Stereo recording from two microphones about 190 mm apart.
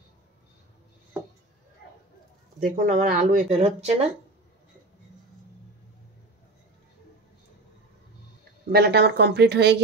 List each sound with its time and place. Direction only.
2.6 s speech: 45° right (ahead or behind)
8.7 s speech: 55° right (ahead or behind)